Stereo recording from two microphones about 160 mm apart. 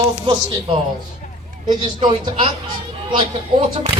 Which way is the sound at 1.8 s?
30° right (ahead or behind).